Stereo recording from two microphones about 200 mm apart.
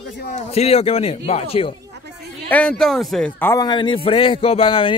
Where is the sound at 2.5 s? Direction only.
5° left (ahead or behind).